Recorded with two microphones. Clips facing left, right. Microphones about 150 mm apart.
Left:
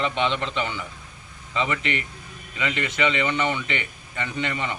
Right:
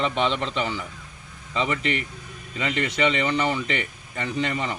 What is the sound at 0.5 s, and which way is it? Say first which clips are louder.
A man's voice: right 1 dB; 35° right (ahead or behind).